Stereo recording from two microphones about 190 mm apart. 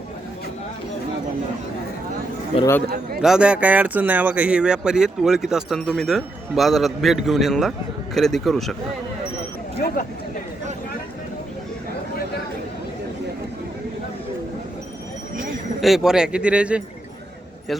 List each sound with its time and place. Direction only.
2.5 s a man's voice: 30° left (ahead or behind)
3.2 s speech: 5° right (ahead or behind)
15.8 s speech: centre (ahead or behind)